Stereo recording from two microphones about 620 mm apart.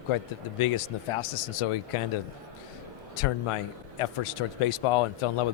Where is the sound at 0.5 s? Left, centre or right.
Left.